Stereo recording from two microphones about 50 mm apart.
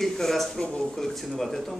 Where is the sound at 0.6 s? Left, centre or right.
Centre.